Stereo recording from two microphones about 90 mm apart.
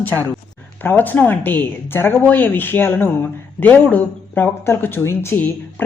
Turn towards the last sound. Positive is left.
turn(degrees=30)  # may be behind; listen again after turning